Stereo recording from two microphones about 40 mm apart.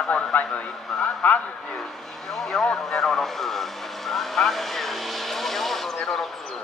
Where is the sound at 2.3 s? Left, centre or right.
Centre.